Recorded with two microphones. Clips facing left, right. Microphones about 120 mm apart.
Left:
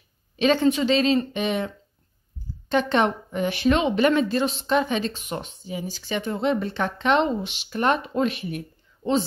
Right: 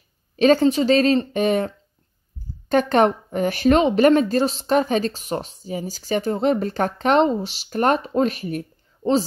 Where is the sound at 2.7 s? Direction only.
45° right (ahead or behind).